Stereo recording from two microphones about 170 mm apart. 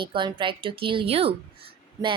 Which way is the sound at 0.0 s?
30° right (ahead or behind).